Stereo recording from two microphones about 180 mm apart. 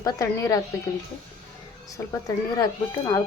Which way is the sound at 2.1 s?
20° left (ahead or behind).